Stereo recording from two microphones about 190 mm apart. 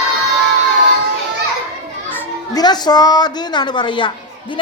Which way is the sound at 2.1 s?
15° left (ahead or behind).